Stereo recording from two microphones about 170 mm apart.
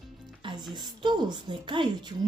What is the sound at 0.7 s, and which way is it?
A woman's voice, 25° right (ahead or behind).